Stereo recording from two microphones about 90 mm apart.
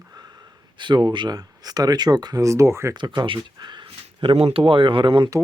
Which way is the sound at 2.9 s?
55° right (ahead or behind).